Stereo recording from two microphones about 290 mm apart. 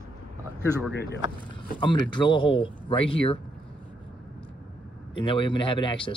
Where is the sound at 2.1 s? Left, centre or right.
Centre.